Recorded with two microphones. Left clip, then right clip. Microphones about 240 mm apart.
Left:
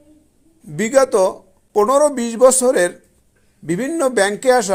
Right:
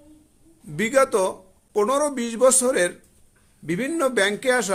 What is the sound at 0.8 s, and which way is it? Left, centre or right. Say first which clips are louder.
A woman's voice: left 6 dB; centre.